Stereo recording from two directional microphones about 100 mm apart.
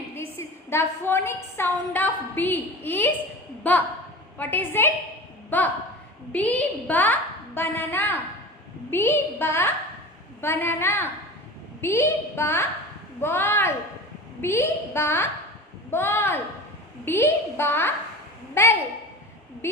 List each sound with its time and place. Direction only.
0.1 s a woman's voice: 25° left (ahead or behind)